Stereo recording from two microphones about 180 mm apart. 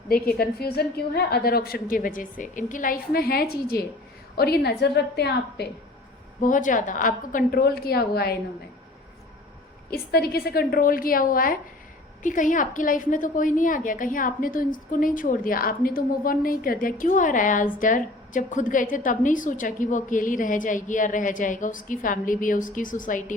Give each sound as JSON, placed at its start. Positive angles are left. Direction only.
{"t": 0.1, "sound": "a woman's voice", "side_deg": 55}
{"t": 6.4, "sound": "a woman's voice", "side_deg": 45}
{"t": 9.9, "sound": "a woman's voice", "side_deg": 60}